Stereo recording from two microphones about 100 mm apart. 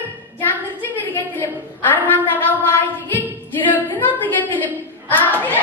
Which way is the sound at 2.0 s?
15° left (ahead or behind).